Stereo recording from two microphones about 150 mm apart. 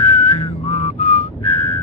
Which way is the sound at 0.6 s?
50° left (ahead or behind).